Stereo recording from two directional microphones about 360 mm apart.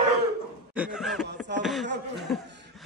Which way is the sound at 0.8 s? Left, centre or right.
Centre.